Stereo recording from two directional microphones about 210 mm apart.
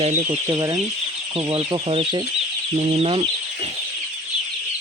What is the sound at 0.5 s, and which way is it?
Speech, 20° right (ahead or behind).